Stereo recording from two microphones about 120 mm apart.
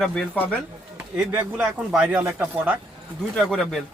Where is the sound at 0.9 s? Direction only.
10° right (ahead or behind).